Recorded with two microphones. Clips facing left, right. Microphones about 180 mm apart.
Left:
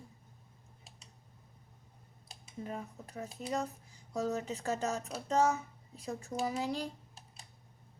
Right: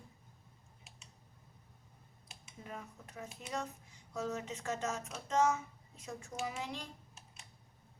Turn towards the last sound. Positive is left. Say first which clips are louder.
# even
turn(degrees=35)  # may be behind; listen again after turning